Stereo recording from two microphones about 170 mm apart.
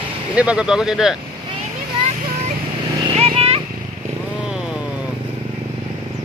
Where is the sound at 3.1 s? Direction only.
35° right (ahead or behind).